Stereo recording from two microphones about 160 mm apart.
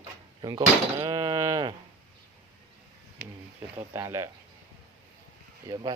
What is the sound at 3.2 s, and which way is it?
Speech, 90° right.